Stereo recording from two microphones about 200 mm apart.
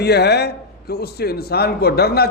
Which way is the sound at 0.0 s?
55° left (ahead or behind).